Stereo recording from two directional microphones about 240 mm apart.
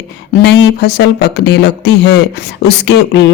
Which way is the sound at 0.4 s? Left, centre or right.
Left.